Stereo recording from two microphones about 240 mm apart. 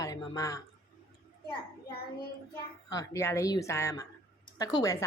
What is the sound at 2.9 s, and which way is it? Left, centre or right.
A woman's voice, centre.